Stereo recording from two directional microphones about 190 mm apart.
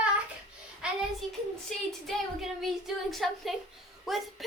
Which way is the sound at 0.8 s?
5° right (ahead or behind).